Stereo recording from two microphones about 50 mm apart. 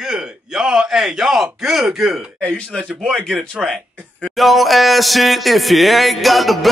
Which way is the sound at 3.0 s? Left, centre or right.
Centre.